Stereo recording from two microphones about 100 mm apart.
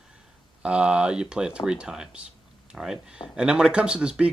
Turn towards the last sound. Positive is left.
turn(degrees=-10)  # may be behind; listen again after turning